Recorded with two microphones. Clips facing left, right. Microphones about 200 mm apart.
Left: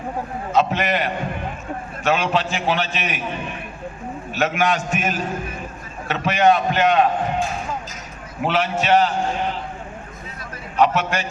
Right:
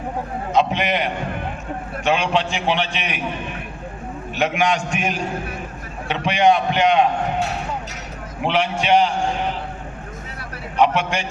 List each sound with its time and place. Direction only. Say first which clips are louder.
0.5 s a man's voice: even; 15° right (ahead or behind)
2.3 s a man's voice: right 1 dB; 15° right (ahead or behind)
4.4 s a man's voice: even; 15° right (ahead or behind)
7.3 s speech: even; 70° right (ahead or behind)
8.4 s a man's voice: even; 15° right (ahead or behind)
10.8 s a man's voice: even; 15° right (ahead or behind)